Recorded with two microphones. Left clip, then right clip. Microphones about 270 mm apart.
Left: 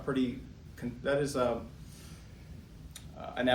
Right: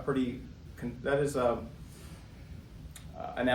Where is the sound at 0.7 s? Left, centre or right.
Centre.